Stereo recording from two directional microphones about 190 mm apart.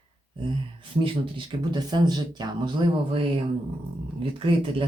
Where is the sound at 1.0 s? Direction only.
25° right (ahead or behind).